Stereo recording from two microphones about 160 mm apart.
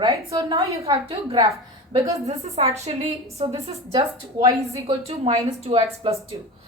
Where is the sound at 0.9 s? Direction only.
35° right (ahead or behind).